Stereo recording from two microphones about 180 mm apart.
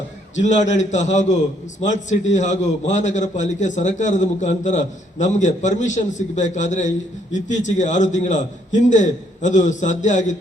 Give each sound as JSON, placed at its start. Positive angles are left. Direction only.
{"t": 0.3, "sound": "a man's voice", "side_deg": 40}